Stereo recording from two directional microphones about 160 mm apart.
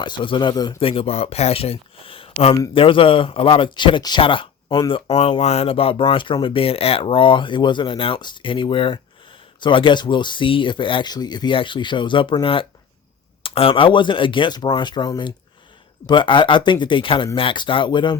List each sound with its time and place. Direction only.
0.0 s speech: 30° left (ahead or behind)
0.8 s speech: 35° left (ahead or behind)